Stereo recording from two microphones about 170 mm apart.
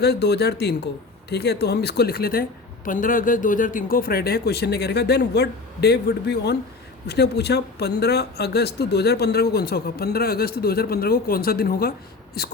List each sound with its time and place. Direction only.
0.0 s speech: 75° left (ahead or behind)